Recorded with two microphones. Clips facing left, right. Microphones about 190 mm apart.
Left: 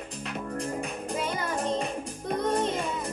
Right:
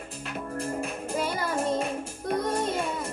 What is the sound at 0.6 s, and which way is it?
Music, centre (ahead or behind).